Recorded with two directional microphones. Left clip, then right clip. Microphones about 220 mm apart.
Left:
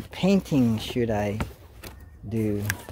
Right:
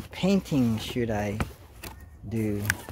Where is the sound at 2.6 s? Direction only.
15° right (ahead or behind).